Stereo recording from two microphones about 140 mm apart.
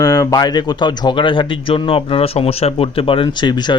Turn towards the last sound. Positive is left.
turn(degrees=35)  # may be behind; listen again after turning